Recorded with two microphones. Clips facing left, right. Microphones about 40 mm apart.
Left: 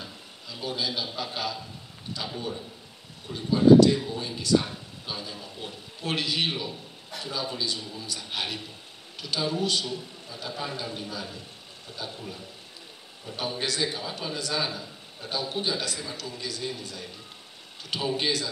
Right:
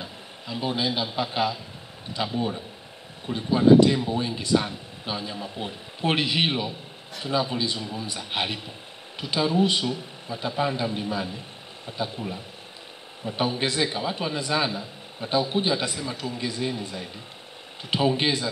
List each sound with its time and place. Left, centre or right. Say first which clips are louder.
0.0 s a man's voice: right 4 dB; right
13.2 s a man's voice: right 6 dB; right